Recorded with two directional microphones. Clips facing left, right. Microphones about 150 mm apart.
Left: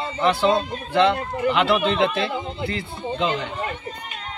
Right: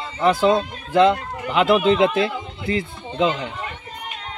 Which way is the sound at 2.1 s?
30° left (ahead or behind).